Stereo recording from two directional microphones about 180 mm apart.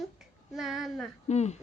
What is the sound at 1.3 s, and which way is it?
Speech, 40° left (ahead or behind).